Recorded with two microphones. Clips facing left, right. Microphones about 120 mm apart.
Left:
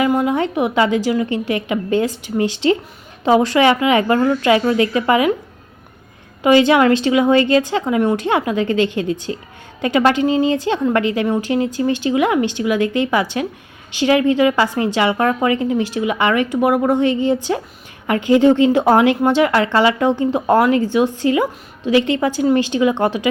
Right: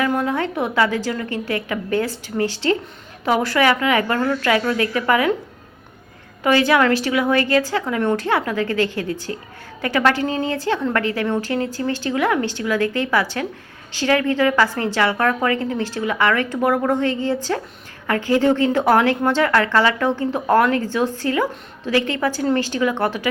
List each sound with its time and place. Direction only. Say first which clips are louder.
0.0 s a woman's voice: left 4 dB; 15° left (ahead or behind)
6.4 s a woman's voice: left 4 dB; 20° left (ahead or behind)